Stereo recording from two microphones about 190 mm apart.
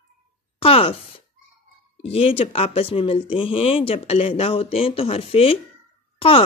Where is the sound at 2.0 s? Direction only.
30° left (ahead or behind).